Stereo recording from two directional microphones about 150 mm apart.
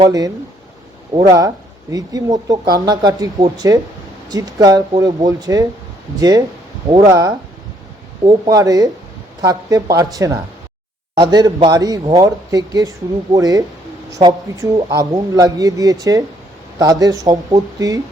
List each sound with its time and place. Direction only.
0.0 s speech: 25° right (ahead or behind)